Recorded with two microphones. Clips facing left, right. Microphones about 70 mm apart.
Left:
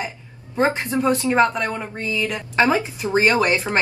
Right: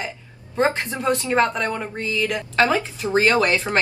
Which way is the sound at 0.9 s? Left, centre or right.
Centre.